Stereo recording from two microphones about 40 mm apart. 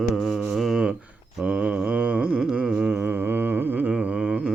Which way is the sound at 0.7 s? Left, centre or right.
Right.